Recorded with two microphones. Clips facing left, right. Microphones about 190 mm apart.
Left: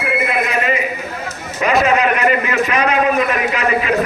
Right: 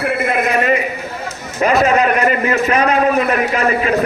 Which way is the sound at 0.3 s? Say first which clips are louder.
Right 3 dB; 45° right (ahead or behind).